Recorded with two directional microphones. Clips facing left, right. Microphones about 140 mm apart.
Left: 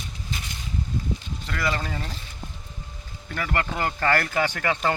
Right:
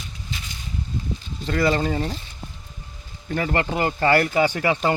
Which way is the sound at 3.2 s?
30° right (ahead or behind).